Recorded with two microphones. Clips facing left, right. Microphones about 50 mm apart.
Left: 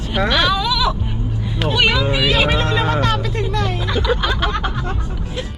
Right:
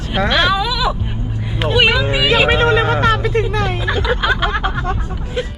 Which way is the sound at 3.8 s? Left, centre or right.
Centre.